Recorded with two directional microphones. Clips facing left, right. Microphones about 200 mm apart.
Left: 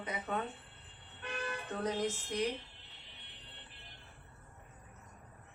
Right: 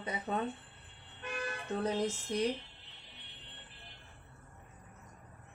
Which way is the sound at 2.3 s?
35° right (ahead or behind).